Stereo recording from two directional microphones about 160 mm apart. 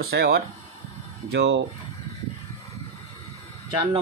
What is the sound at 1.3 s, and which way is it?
Speech, 90° right.